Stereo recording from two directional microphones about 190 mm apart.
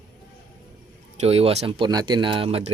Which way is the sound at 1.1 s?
30° right (ahead or behind).